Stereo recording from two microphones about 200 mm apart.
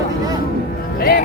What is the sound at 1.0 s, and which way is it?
Music, 50° left (ahead or behind).